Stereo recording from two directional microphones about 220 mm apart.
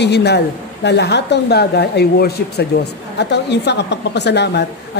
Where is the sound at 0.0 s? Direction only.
50° left (ahead or behind).